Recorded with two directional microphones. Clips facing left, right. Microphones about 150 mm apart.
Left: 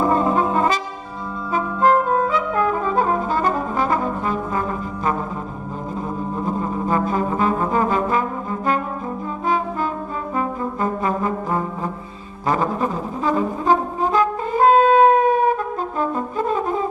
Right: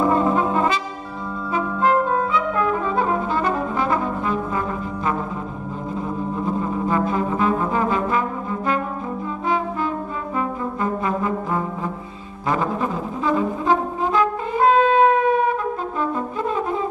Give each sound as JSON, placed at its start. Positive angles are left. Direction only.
{"t": 0.1, "sound": "brass instrument", "side_deg": 40}
{"t": 6.4, "sound": "brass instrument", "side_deg": 40}
{"t": 12.4, "sound": "brass instrument", "side_deg": 40}